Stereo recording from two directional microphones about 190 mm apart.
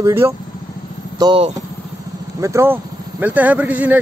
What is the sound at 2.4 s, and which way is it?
Speech, 15° right (ahead or behind).